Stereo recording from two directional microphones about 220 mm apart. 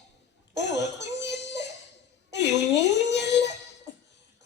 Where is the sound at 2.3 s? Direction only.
50° left (ahead or behind).